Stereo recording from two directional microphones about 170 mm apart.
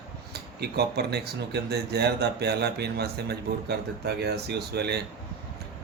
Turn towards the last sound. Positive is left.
turn(degrees=-75)  # may be behind; listen again after turning